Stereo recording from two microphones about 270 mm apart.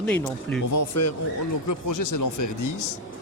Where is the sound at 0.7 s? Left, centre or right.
Left.